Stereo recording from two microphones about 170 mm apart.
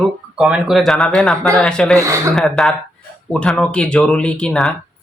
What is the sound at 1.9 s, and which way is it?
Speech, 15° right (ahead or behind).